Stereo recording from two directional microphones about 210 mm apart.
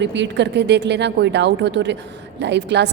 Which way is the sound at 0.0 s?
55° right (ahead or behind).